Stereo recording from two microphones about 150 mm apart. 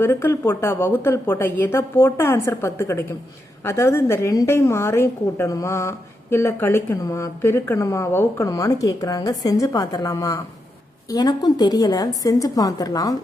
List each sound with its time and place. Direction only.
0.0 s a woman's voice: 15° left (ahead or behind)